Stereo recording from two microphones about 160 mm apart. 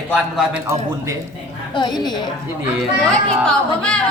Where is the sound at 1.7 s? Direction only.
25° left (ahead or behind).